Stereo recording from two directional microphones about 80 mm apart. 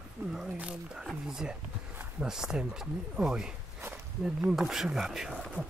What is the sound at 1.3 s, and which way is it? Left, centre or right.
Speech, centre.